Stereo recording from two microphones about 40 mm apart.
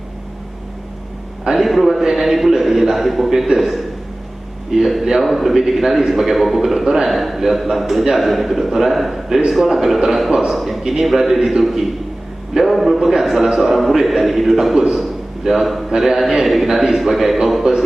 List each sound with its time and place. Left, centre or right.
1.5 s a man's voice: centre